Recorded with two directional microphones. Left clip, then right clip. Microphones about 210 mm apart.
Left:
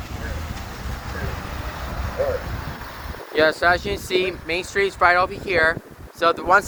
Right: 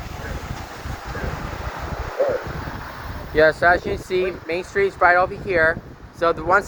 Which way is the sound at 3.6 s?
20° left (ahead or behind).